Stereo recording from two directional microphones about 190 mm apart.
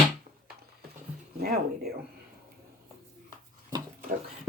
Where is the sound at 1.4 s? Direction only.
55° right (ahead or behind).